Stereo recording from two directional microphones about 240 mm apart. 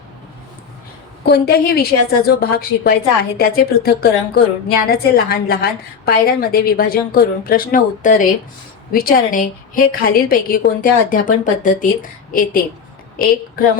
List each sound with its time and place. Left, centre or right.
1.2 s a woman's voice: left